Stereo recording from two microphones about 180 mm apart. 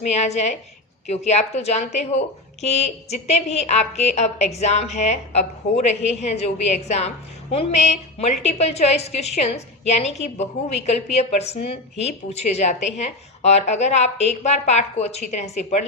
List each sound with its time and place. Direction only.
0.0 s a woman's voice: 40° left (ahead or behind)